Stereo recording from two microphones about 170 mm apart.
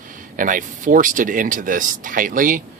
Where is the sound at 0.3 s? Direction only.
50° right (ahead or behind).